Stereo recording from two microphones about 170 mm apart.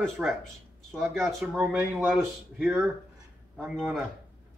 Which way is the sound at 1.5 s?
10° right (ahead or behind).